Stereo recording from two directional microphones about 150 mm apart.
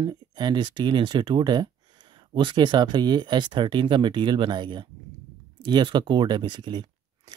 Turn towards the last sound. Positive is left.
turn(degrees=-30)  # may be behind; listen again after turning